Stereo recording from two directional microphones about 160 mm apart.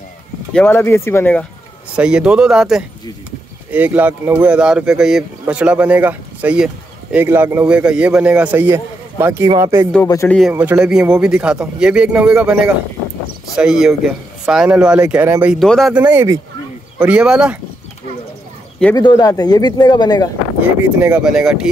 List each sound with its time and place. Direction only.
0.5 s speech: 10° left (ahead or behind)
2.0 s a man's voice: 5° right (ahead or behind)
10.2 s a man's voice: 5° left (ahead or behind)
10.5 s a man's voice: 10° right (ahead or behind)
15.6 s speech: centre (ahead or behind)
18.9 s speech: 25° left (ahead or behind)
20.8 s a man's voice: 10° right (ahead or behind)